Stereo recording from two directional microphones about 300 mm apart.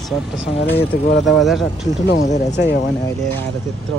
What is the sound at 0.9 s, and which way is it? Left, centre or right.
Speech, left.